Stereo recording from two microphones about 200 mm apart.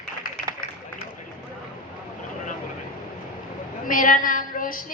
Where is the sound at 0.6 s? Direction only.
45° left (ahead or behind).